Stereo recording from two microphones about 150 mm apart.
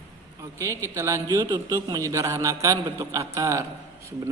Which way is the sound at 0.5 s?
20° right (ahead or behind).